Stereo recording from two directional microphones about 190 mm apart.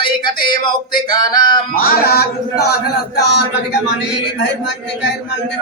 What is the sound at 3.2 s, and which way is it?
Speech, 65° left (ahead or behind).